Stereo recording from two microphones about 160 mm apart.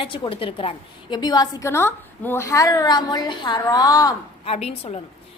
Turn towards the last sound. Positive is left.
turn(degrees=40)  # may be behind; listen again after turning